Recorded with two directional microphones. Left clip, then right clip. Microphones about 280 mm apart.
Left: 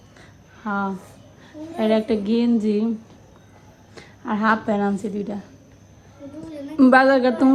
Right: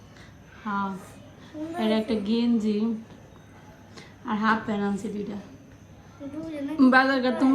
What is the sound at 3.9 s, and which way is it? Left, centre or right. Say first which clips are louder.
A woman's voice: left 4 dB; centre.